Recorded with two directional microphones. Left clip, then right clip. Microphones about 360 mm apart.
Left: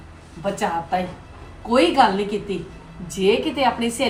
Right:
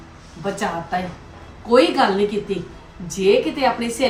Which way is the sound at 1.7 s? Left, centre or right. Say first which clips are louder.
Right 1 dB; centre.